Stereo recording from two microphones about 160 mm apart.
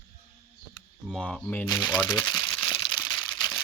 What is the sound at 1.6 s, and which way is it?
Speech, 25° left (ahead or behind).